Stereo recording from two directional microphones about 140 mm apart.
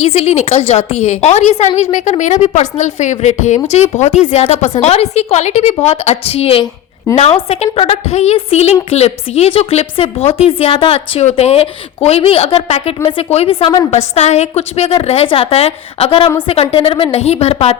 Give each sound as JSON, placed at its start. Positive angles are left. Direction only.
{"t": 0.0, "sound": "a woman's voice", "side_deg": 50}